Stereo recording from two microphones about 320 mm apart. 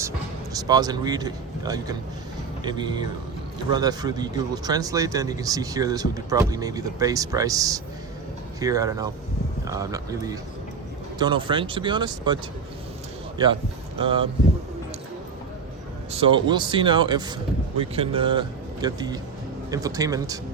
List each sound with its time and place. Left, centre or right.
0.5 s speech: centre
14.0 s speech: centre
16.1 s speech: centre